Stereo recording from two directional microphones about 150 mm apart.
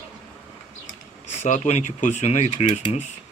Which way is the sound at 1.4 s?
50° left (ahead or behind).